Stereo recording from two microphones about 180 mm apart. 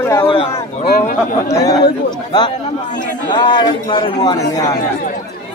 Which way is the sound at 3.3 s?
25° left (ahead or behind).